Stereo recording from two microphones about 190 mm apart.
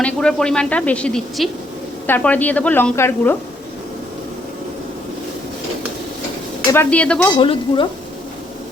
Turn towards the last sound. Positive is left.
turn(degrees=25)  # may be behind; listen again after turning